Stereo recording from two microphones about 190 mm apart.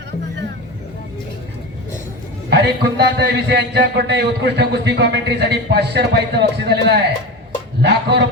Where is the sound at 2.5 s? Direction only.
60° right (ahead or behind).